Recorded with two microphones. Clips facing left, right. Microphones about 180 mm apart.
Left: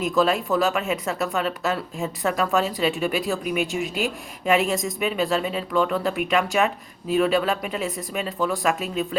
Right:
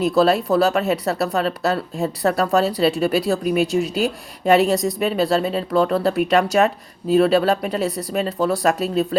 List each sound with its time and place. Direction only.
0.0 s speech: 35° right (ahead or behind)